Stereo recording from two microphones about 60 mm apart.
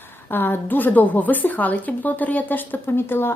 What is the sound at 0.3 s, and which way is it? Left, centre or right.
A woman's voice, left.